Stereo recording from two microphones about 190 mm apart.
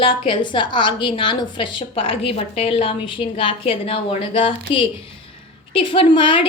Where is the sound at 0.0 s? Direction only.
25° left (ahead or behind).